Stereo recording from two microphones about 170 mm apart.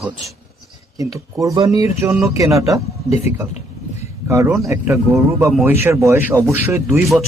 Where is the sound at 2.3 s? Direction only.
20° right (ahead or behind).